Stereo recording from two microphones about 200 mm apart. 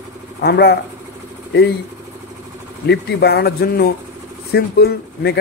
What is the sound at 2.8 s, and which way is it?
Speech, 55° left (ahead or behind).